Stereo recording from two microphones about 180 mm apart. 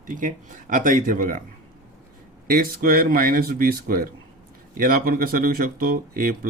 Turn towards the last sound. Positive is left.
turn(degrees=-50)  # may be behind; listen again after turning